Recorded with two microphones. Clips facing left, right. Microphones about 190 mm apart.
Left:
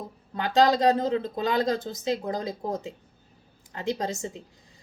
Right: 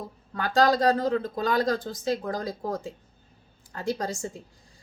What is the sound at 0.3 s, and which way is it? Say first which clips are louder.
A woman's voice: left 1 dB; 20° left (ahead or behind).